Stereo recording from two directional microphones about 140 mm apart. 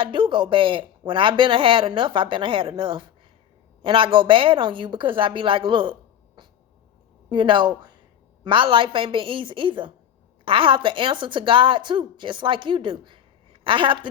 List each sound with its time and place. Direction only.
0.0 s a woman's voice: 35° right (ahead or behind)